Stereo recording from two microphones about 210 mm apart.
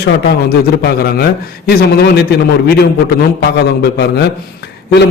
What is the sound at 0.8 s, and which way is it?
A man's voice, 50° left (ahead or behind).